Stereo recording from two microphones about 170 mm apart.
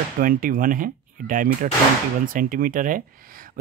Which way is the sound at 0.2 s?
55° right (ahead or behind).